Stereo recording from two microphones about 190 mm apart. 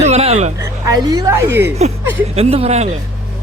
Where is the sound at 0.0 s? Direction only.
35° right (ahead or behind).